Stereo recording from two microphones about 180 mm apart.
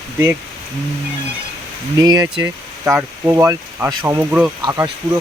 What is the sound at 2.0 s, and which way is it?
Speech, 20° right (ahead or behind).